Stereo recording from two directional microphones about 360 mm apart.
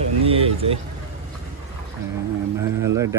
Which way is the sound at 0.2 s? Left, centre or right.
Centre.